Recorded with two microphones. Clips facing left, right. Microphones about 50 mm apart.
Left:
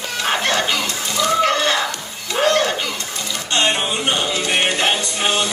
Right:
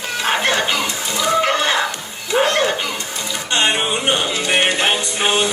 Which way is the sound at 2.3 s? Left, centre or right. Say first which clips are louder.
Right 1 dB; centre.